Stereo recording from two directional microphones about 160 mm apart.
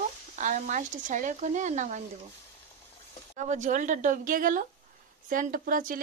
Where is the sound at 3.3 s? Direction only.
50° right (ahead or behind).